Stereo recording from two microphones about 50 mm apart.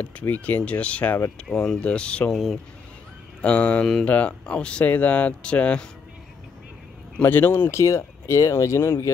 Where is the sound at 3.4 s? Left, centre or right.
Left.